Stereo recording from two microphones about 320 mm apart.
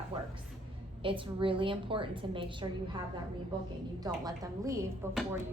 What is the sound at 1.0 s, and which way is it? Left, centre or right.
A woman's voice, centre.